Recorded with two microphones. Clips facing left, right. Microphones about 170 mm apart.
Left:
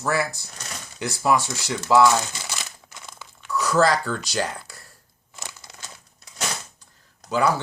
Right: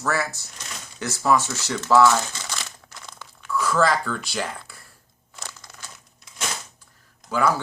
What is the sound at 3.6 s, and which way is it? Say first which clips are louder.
Speech: left 2 dB; 40° left (ahead or behind).